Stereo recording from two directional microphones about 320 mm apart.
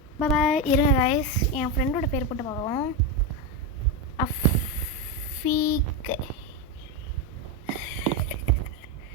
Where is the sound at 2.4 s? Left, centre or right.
Centre.